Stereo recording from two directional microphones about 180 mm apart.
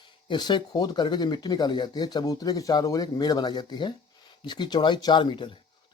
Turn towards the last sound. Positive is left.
turn(degrees=25)  # may be behind; listen again after turning